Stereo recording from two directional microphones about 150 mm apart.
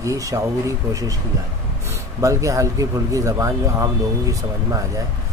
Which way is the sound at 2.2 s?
20° right (ahead or behind).